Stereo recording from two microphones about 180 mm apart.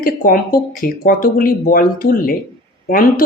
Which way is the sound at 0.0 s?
50° left (ahead or behind).